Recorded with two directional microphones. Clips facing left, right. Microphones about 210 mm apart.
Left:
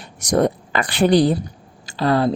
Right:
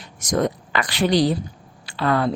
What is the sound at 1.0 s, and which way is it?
Speech, 55° left (ahead or behind).